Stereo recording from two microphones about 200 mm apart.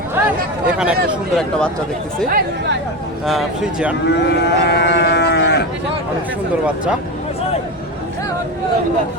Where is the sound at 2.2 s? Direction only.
45° right (ahead or behind).